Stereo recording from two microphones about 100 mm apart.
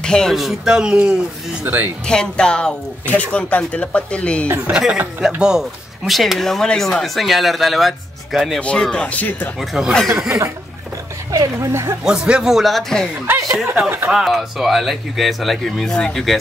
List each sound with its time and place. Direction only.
0.0 s speech: 5° left (ahead or behind)
1.6 s speech: 20° right (ahead or behind)
2.0 s speech: 10° left (ahead or behind)
4.6 s speech: 10° right (ahead or behind)
8.5 s speech: 10° left (ahead or behind)
9.6 s speech: centre (ahead or behind)
11.3 s speech: 30° right (ahead or behind)
12.0 s speech: 5° right (ahead or behind)
13.8 s speech: 20° right (ahead or behind)
14.1 s speech: 5° right (ahead or behind)